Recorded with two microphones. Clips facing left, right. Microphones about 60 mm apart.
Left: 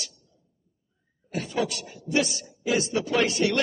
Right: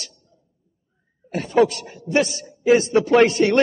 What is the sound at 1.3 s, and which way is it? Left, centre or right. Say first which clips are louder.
A man's voice: right 10 dB; right.